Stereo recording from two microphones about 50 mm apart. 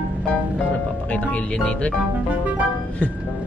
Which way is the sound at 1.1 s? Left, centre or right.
Left.